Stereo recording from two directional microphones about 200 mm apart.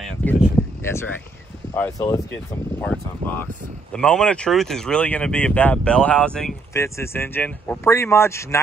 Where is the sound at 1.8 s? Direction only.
15° left (ahead or behind).